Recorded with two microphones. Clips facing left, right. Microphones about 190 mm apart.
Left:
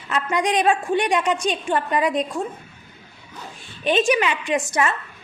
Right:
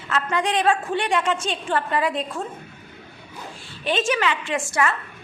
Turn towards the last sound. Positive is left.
turn(degrees=20)  # may be behind; listen again after turning